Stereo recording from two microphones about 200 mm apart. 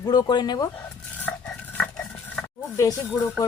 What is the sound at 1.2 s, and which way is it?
Cutlery, 5° left (ahead or behind).